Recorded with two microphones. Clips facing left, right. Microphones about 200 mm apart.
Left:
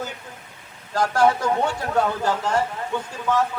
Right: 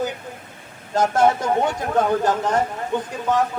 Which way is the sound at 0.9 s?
20° right (ahead or behind).